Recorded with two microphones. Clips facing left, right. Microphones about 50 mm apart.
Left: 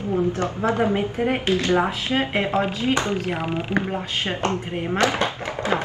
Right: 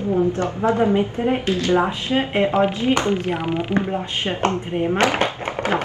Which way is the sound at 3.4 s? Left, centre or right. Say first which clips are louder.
Right 3 dB; right.